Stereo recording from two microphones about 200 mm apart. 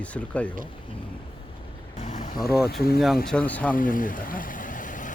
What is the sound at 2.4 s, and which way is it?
Speech, 50° left (ahead or behind).